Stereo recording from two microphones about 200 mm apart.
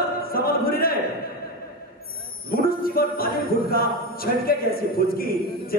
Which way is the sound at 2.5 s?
50° left (ahead or behind).